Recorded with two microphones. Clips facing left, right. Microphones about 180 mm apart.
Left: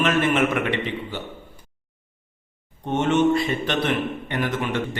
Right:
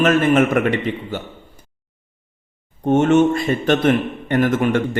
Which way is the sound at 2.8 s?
45° right (ahead or behind).